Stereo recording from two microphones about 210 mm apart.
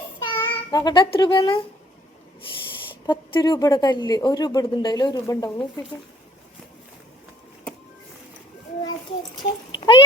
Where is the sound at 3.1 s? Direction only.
20° left (ahead or behind).